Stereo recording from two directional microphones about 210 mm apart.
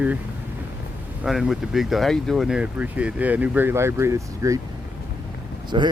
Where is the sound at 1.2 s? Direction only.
Centre (ahead or behind).